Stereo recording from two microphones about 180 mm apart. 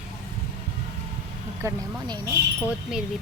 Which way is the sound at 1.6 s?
20° right (ahead or behind).